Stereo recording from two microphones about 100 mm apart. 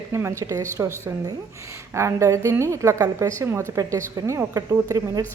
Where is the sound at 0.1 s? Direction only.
25° right (ahead or behind).